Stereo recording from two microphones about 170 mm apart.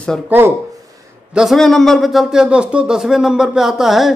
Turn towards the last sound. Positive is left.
turn(degrees=0)  # may be behind; listen again after turning